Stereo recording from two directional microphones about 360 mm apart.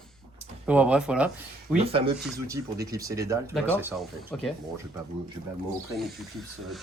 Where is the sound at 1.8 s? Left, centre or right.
Centre.